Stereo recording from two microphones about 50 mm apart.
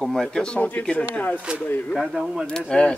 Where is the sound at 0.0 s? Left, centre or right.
Centre.